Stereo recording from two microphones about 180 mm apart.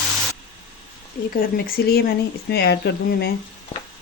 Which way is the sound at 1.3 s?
55° left (ahead or behind).